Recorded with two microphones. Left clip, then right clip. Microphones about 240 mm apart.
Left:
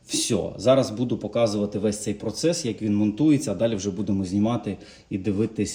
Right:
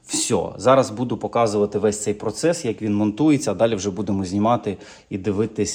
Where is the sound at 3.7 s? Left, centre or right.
Centre.